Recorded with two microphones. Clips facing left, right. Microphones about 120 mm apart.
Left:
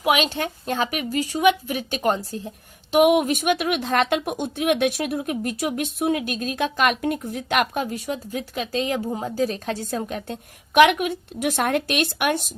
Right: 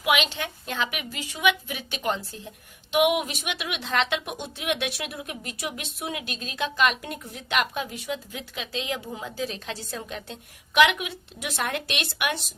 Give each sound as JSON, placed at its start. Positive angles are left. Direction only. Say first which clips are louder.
{"t": 0.0, "sound": "a woman's voice", "louder": "left 4 dB", "side_deg": 40}